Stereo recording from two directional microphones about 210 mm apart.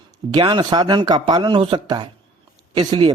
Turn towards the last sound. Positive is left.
turn(degrees=-20)  # may be behind; listen again after turning